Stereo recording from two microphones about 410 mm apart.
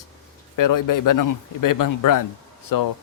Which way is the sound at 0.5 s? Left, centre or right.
Left.